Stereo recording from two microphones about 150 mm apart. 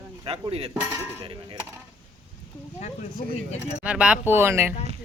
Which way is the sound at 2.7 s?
50° left (ahead or behind).